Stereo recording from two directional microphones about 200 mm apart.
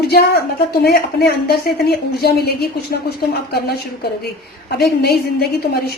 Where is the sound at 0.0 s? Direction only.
50° left (ahead or behind).